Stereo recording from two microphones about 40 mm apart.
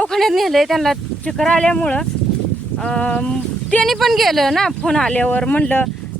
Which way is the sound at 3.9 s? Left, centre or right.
Centre.